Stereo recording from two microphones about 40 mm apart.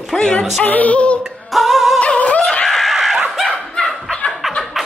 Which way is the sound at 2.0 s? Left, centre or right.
Left.